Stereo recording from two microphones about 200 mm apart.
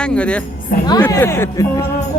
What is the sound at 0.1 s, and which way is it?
A man's voice, 5° left (ahead or behind).